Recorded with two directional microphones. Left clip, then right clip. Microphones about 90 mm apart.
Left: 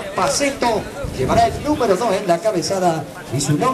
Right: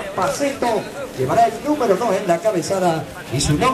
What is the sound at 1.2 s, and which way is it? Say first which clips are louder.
Speech: even; 5° left (ahead or behind).